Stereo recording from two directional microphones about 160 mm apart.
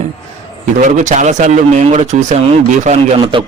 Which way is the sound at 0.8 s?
50° right (ahead or behind).